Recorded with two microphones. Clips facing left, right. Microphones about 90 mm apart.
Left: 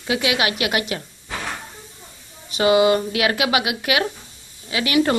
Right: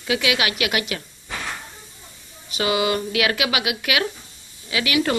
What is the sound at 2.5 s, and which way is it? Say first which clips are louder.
Speech: left 6 dB; 35° left (ahead or behind).